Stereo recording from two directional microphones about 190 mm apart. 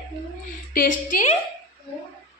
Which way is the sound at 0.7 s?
45° left (ahead or behind).